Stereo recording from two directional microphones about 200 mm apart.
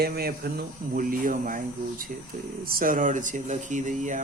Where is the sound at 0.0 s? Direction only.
50° right (ahead or behind).